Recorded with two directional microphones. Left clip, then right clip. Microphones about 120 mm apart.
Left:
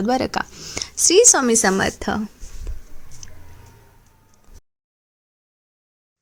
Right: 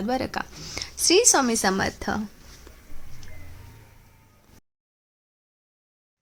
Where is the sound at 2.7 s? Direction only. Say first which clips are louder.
Left 4 dB; 15° left (ahead or behind).